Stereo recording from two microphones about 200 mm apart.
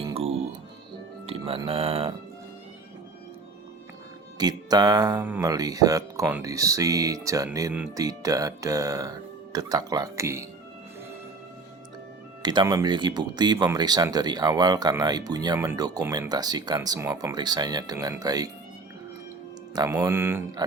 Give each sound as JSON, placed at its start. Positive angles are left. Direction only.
{"t": 0.1, "sound": "music", "side_deg": -30}
{"t": 1.3, "sound": "speech", "side_deg": -30}
{"t": 4.4, "sound": "speech", "side_deg": -20}
{"t": 12.4, "sound": "speech", "side_deg": -20}
{"t": 19.7, "sound": "speech", "side_deg": -15}